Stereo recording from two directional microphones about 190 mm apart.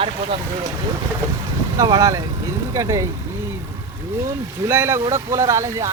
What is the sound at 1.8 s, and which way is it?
Speech, 20° right (ahead or behind).